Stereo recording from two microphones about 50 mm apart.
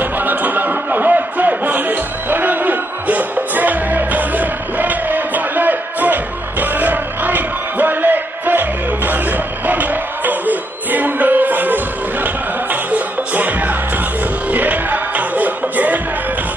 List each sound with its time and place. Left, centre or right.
0.0 s music: right